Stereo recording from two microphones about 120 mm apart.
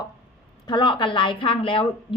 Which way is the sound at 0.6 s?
40° left (ahead or behind).